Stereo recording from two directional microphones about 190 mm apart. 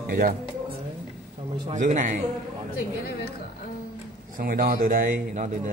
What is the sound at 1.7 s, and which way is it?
Speech, 40° right (ahead or behind).